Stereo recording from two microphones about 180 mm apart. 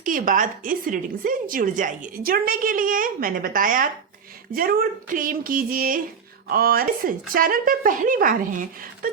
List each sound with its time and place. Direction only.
0.0 s a woman's voice: 50° right (ahead or behind)